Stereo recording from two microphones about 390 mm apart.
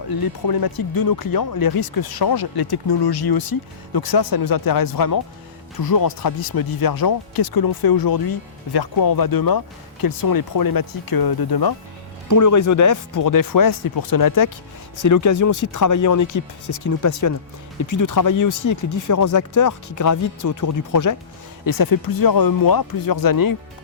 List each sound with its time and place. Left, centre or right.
0.1 s speech: left
12.3 s speech: left